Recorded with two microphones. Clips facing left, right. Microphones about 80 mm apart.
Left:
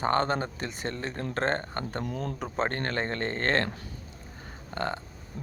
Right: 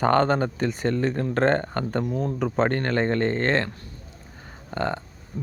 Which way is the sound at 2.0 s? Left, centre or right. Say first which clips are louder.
Right 8 dB; centre.